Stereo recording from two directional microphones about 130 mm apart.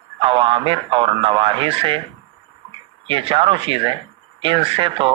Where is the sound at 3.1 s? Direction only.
45° right (ahead or behind).